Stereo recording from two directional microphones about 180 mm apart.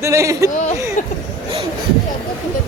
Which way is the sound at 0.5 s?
40° left (ahead or behind).